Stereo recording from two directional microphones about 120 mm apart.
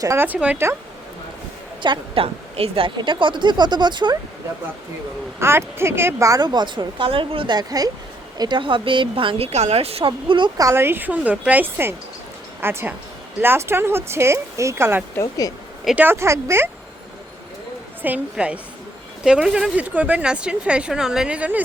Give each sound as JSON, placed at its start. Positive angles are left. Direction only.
{"t": 0.0, "sound": "speech", "side_deg": -25}
{"t": 0.3, "sound": "speech", "side_deg": -10}
{"t": 1.8, "sound": "a woman's voice", "side_deg": -45}
{"t": 5.4, "sound": "a woman's voice", "side_deg": -20}
{"t": 10.1, "sound": "a woman's voice", "side_deg": -40}
{"t": 10.6, "sound": "speech", "side_deg": -20}
{"t": 15.1, "sound": "speech", "side_deg": 30}
{"t": 16.0, "sound": "speech", "side_deg": -20}
{"t": 18.0, "sound": "speech", "side_deg": -10}